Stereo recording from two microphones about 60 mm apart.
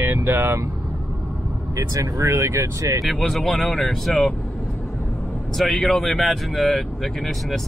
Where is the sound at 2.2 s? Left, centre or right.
Right.